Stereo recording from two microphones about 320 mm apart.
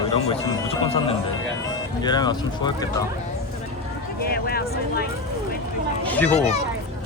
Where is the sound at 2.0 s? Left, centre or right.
Centre.